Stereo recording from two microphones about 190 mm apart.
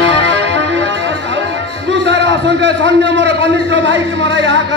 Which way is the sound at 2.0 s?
70° right (ahead or behind).